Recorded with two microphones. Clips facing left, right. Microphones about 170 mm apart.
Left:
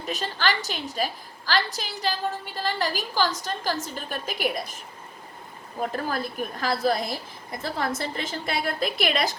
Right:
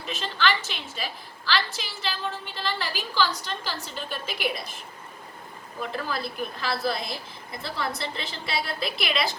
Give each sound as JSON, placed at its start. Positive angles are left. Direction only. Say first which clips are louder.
{"t": 0.0, "sound": "a woman's voice", "louder": "even", "side_deg": 40}
{"t": 5.8, "sound": "a woman's voice", "louder": "left 3 dB", "side_deg": 45}